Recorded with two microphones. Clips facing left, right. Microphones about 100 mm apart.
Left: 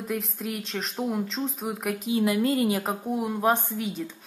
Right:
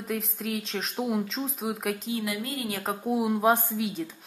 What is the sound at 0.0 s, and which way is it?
Speech, centre (ahead or behind).